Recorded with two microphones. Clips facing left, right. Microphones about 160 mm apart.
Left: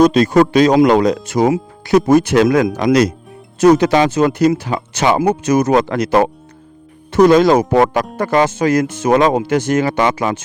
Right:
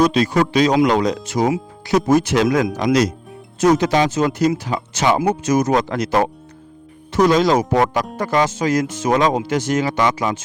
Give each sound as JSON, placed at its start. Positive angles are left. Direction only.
{"t": 0.0, "sound": "speech", "side_deg": 50}